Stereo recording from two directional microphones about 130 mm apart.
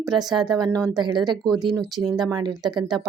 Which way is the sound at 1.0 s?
35° right (ahead or behind).